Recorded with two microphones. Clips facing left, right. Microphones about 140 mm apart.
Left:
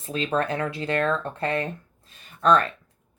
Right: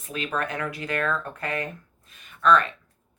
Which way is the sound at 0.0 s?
30° left (ahead or behind).